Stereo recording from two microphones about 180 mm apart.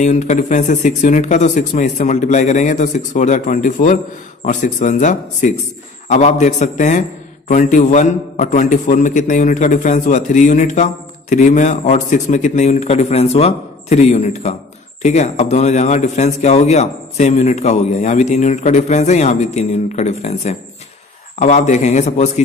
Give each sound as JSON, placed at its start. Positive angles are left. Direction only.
{"t": 0.0, "sound": "a man's voice", "side_deg": 40}